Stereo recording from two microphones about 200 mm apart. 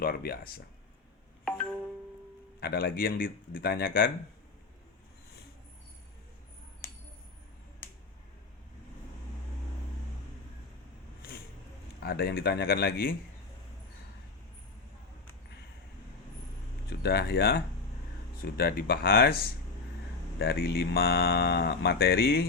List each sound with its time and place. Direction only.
0.0 s speech: 50° left (ahead or behind)
1.5 s music: 5° left (ahead or behind)
2.6 s speech: 50° left (ahead or behind)
12.0 s speech: 55° left (ahead or behind)
17.0 s speech: 55° left (ahead or behind)